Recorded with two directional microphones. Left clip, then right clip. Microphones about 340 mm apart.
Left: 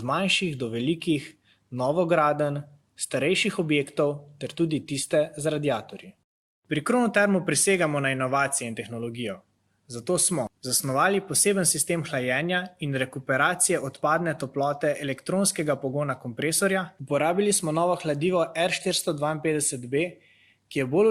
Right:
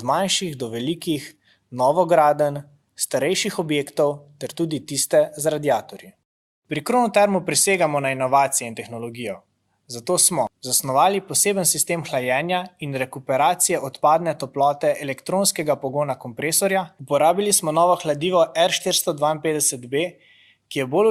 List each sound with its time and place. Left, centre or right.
0.0 s speech: centre